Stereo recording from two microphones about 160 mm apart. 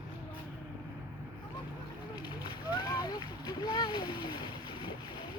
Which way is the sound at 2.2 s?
30° left (ahead or behind).